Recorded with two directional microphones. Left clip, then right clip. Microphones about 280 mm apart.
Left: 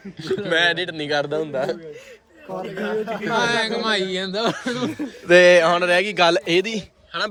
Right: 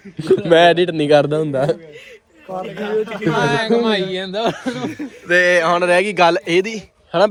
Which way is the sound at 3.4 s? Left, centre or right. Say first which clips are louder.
Right 6 dB; right.